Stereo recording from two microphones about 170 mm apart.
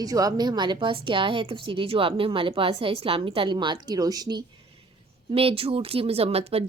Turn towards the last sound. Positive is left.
turn(degrees=-35)  # may be behind; listen again after turning